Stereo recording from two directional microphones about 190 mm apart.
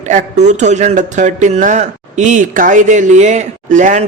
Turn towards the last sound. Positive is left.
turn(degrees=-40)  # may be behind; listen again after turning